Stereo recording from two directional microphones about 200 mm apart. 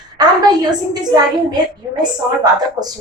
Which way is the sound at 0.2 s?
20° right (ahead or behind).